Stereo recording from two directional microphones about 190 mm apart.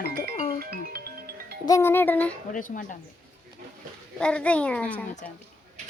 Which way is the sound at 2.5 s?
45° left (ahead or behind).